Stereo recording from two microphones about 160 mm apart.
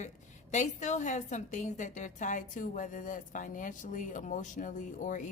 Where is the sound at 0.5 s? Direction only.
50° left (ahead or behind).